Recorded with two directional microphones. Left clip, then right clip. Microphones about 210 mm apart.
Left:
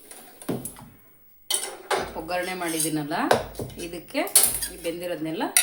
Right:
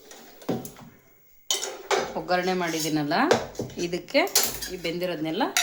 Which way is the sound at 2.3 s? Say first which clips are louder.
Right 4 dB; 35° right (ahead or behind).